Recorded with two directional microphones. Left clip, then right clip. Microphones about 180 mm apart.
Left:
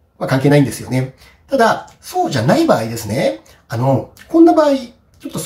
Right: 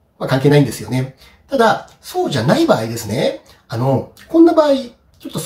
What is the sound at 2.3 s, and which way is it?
Speech, 15° left (ahead or behind).